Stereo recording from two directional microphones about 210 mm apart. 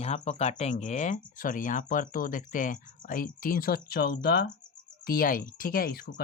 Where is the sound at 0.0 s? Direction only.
30° left (ahead or behind).